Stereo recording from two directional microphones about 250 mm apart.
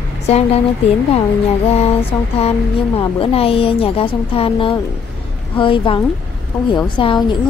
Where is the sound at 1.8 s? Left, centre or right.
Left.